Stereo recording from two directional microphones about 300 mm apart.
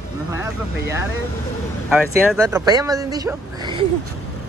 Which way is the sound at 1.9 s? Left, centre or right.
Centre.